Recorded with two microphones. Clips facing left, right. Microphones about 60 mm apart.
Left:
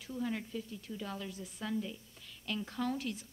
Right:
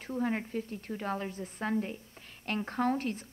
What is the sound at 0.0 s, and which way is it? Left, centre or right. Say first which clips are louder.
A woman's voice: right 5 dB; right.